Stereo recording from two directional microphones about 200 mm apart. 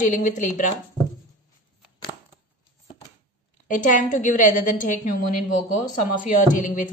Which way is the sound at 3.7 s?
40° left (ahead or behind).